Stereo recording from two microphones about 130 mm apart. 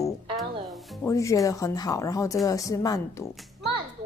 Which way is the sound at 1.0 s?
25° left (ahead or behind).